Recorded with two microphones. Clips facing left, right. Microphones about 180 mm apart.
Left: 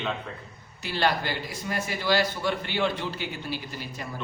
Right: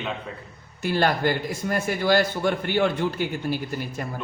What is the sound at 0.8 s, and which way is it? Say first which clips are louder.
A man's voice: right 4 dB; 50° right (ahead or behind).